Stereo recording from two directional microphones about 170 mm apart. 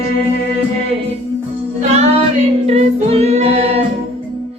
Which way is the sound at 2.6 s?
40° right (ahead or behind).